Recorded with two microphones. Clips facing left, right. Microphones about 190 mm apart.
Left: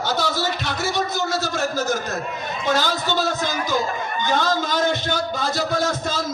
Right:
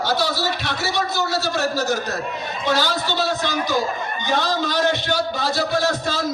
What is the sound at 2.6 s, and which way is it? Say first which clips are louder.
Speech: even; 50° left (ahead or behind).